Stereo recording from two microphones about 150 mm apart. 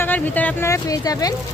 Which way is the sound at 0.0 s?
10° left (ahead or behind).